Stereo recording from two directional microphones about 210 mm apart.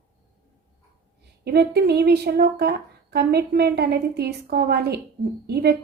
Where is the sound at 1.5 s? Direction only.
50° right (ahead or behind).